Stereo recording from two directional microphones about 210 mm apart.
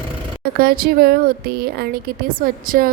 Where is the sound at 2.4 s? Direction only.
40° right (ahead or behind).